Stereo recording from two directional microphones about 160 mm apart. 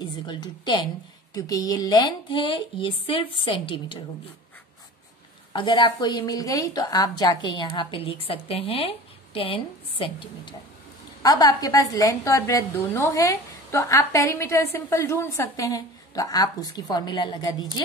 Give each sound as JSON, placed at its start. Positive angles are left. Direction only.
{"t": 0.3, "sound": "a woman's voice", "side_deg": 25}
{"t": 5.5, "sound": "a woman's voice", "side_deg": 30}